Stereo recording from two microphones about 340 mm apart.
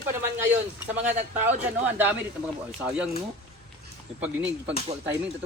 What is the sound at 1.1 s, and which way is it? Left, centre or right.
Speech, centre.